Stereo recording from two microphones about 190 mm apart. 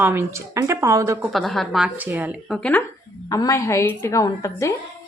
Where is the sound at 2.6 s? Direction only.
10° left (ahead or behind).